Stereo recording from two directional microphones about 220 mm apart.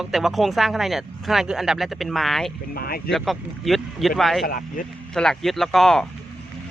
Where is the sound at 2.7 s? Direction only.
45° left (ahead or behind).